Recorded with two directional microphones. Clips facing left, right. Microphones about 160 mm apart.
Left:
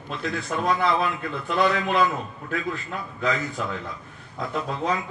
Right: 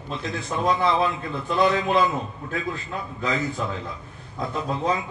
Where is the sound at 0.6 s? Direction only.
25° right (ahead or behind).